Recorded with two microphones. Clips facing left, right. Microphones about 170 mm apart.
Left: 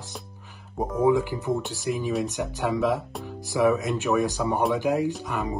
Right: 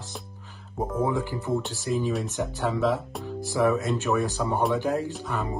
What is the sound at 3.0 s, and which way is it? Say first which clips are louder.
Speech: even; centre (ahead or behind).